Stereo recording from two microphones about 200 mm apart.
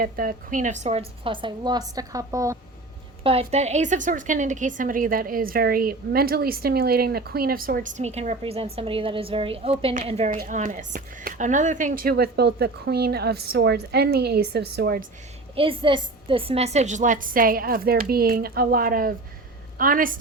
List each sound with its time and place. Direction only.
0.0 s a woman's voice: 45° right (ahead or behind); by 2.6 s 15° right (ahead or behind)
3.2 s a woman's voice: 30° right (ahead or behind)
10.3 s speech: 45° right (ahead or behind)
15.5 s speech: 25° right (ahead or behind); by 20.1 s 45° right (ahead or behind)